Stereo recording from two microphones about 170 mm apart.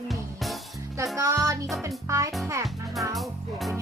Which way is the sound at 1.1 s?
15° right (ahead or behind).